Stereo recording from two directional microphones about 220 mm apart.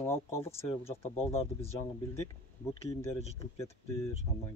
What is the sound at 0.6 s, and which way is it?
Speech, 25° left (ahead or behind).